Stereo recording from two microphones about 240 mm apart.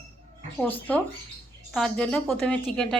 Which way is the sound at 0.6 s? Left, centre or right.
Centre.